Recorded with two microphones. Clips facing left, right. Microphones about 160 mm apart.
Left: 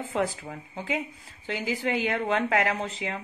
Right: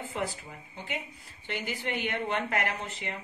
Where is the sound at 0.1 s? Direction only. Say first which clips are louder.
Left 8 dB; 90° left.